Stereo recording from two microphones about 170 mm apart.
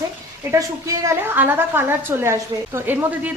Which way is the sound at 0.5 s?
20° right (ahead or behind).